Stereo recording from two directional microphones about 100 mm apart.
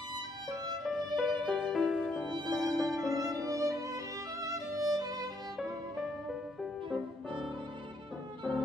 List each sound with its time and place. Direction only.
0.8 s music: centre (ahead or behind)
2.5 s violin: centre (ahead or behind)
3.3 s violin: 35° right (ahead or behind)
8.5 s music: 5° right (ahead or behind)